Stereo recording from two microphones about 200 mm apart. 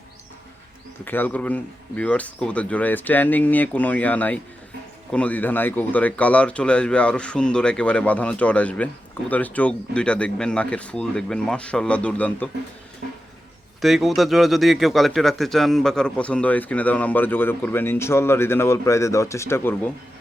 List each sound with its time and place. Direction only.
1.0 s speech: 10° left (ahead or behind)
13.8 s speech: centre (ahead or behind)